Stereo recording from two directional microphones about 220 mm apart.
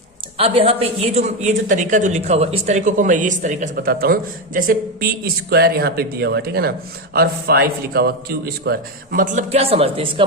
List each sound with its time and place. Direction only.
0.3 s speech: 25° right (ahead or behind)